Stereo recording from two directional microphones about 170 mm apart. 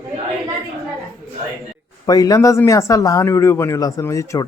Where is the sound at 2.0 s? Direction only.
20° left (ahead or behind).